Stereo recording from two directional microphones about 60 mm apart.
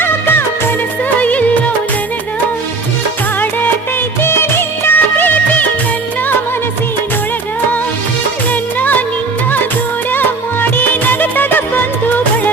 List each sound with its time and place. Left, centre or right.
0.0 s music of bollywood: left
1.2 s music: left
4.2 s music of bollywood: left
8.8 s music of bollywood: left
10.1 s music: left